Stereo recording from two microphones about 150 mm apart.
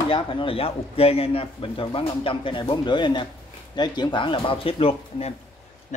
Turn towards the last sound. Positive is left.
turn(degrees=50)  # may be behind; listen again after turning